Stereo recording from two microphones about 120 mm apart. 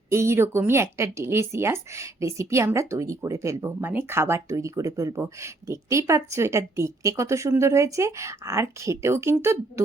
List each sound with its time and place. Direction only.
0.1 s speech: 20° right (ahead or behind)